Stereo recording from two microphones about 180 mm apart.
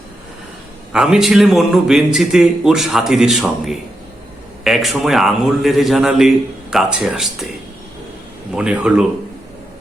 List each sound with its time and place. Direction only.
0.9 s a man's voice: centre (ahead or behind)
8.5 s a man's voice: 5° right (ahead or behind)